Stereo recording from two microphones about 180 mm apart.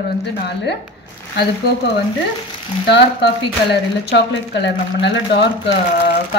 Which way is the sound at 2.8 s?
70° left (ahead or behind).